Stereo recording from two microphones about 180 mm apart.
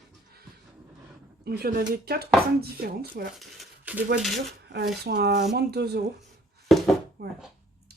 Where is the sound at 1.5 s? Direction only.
60° right (ahead or behind).